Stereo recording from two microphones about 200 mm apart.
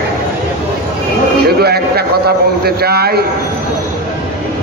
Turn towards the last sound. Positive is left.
turn(degrees=-50)  # may be behind; listen again after turning